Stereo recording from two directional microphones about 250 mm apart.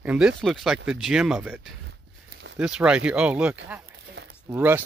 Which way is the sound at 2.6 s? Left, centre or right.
Centre.